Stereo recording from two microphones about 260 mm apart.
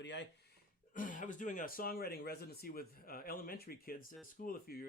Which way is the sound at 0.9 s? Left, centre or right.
Left.